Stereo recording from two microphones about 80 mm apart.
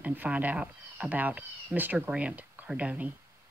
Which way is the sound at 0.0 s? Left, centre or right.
Centre.